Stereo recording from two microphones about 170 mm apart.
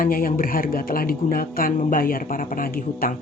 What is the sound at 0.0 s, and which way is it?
Speech, 55° left (ahead or behind).